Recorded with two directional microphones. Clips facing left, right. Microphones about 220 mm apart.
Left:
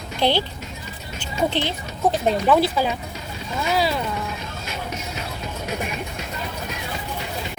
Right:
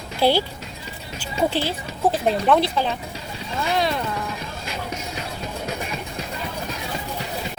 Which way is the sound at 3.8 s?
5° left (ahead or behind).